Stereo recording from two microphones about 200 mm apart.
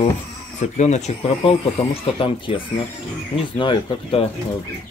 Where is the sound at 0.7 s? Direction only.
35° left (ahead or behind).